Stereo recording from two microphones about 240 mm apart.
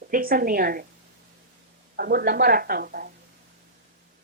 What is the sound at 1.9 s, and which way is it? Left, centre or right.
A woman's voice, right.